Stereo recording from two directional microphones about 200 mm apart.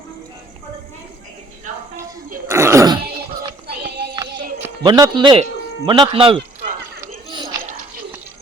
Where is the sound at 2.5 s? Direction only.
15° right (ahead or behind).